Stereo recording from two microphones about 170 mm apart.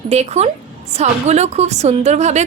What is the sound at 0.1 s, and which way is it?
A woman's voice, 40° right (ahead or behind).